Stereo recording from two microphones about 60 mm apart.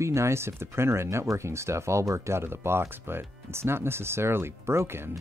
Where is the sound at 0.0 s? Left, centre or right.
Right.